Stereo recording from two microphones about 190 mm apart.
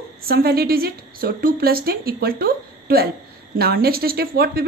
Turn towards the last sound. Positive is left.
turn(degrees=-55)  # may be behind; listen again after turning